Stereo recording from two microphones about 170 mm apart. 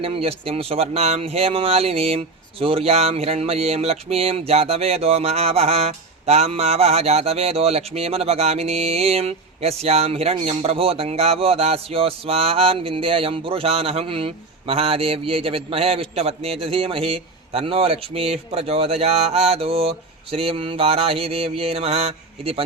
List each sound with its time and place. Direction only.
0.0 s speech: 35° right (ahead or behind)